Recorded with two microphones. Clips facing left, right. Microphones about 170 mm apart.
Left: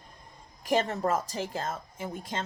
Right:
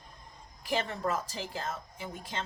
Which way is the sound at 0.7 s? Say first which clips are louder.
Left 5 dB; 45° left (ahead or behind).